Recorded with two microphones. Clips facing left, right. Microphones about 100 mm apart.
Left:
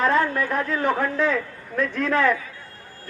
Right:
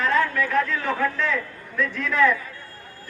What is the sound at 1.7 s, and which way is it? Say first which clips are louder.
Speech: left 1 dB; 45° left (ahead or behind).